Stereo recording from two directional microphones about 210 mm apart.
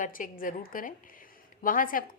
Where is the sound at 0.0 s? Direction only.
40° left (ahead or behind).